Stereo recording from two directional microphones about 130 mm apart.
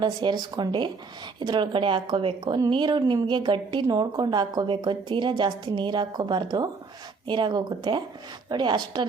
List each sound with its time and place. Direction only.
0.0 s a woman's voice: 35° right (ahead or behind)